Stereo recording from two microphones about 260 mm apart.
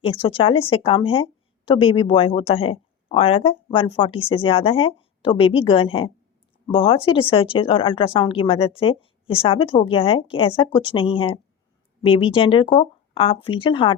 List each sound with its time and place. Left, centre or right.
0.0 s speech: left